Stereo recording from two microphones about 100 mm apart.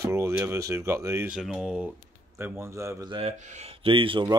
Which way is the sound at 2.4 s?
20° right (ahead or behind).